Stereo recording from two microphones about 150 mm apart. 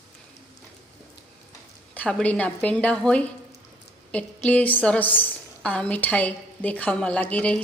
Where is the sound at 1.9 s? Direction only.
10° left (ahead or behind).